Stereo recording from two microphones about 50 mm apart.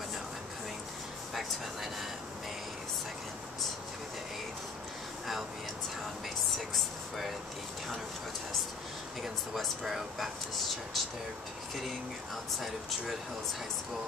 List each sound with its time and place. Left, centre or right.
6.7 s speech: centre
9.2 s speech: centre